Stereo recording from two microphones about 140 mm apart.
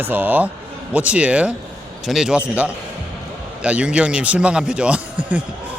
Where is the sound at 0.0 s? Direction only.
10° right (ahead or behind).